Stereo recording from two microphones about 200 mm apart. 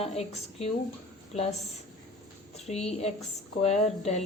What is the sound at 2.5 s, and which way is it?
A woman's voice, 30° left (ahead or behind).